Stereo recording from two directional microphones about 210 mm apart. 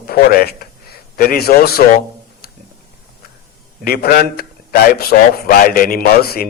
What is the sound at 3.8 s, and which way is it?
A man's voice, 45° left (ahead or behind).